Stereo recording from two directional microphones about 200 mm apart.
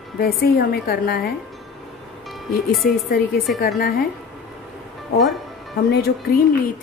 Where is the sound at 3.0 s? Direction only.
45° left (ahead or behind).